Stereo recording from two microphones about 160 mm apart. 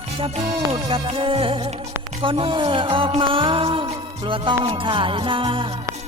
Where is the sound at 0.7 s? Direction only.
35° right (ahead or behind).